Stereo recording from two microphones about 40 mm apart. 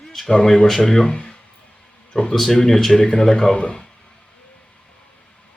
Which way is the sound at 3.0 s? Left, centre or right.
Centre.